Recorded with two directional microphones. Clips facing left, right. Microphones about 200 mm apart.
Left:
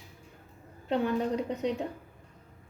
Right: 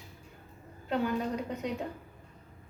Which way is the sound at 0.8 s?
25° left (ahead or behind).